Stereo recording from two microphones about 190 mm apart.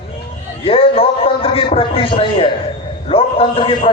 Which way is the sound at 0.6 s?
30° left (ahead or behind).